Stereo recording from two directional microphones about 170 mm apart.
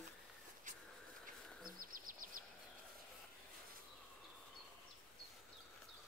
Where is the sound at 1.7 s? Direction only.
55° right (ahead or behind).